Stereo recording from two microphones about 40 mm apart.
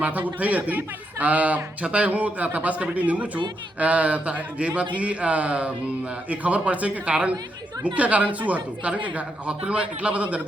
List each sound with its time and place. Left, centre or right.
0.0 s a man's voice: right